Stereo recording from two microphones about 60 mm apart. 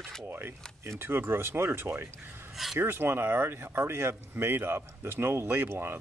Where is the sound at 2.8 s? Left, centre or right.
Right.